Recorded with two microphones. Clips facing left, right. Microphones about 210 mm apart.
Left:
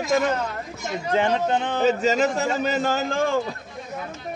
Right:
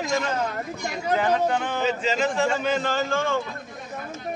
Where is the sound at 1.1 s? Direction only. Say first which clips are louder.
Left 1 dB; 25° left (ahead or behind).